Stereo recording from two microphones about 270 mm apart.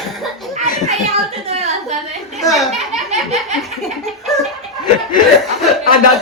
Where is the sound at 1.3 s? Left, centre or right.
Right.